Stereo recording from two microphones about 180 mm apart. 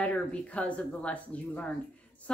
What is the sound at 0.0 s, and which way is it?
Speech, 5° left (ahead or behind).